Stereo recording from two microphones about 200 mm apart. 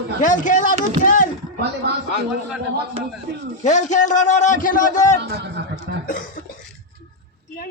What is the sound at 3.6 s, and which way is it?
A man's voice, 35° left (ahead or behind).